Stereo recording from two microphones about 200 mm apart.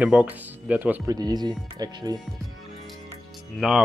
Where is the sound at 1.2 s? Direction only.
20° right (ahead or behind).